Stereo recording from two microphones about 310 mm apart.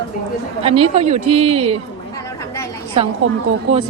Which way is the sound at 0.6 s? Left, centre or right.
Centre.